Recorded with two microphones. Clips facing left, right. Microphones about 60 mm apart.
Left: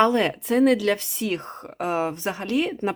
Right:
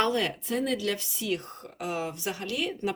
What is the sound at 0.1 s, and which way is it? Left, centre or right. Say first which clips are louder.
Speech: left 6 dB; left.